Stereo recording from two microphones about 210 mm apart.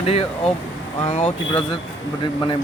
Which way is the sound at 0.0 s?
30° left (ahead or behind).